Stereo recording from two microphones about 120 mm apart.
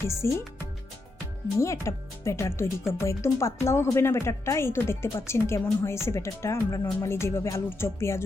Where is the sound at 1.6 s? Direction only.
25° left (ahead or behind).